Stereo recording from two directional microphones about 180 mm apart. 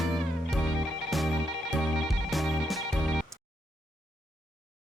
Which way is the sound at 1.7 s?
Centre (ahead or behind).